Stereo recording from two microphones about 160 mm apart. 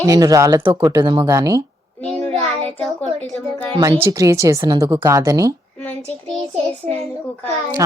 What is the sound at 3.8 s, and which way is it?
A woman's voice, 25° right (ahead or behind).